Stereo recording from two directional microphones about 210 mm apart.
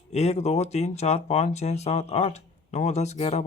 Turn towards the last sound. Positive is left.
turn(degrees=30)  # may be behind; listen again after turning